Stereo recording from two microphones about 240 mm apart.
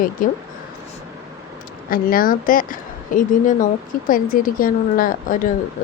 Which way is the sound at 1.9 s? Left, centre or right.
Left.